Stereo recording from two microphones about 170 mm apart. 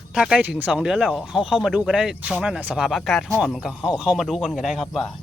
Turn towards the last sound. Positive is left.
turn(degrees=0)  # may be behind; listen again after turning